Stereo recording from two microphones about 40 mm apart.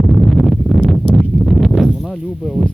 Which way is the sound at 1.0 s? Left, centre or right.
Left.